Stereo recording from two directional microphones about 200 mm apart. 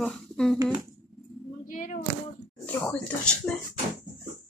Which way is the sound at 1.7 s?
40° left (ahead or behind).